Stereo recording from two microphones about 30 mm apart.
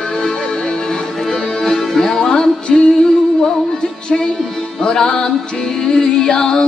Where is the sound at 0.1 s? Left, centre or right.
Centre.